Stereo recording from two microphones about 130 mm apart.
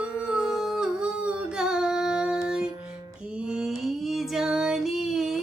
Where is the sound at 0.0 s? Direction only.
5° right (ahead or behind).